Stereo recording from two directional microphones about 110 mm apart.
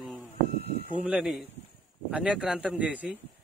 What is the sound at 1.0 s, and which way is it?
A man's voice, 10° right (ahead or behind).